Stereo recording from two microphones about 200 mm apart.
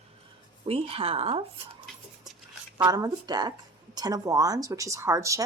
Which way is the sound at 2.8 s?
20° right (ahead or behind).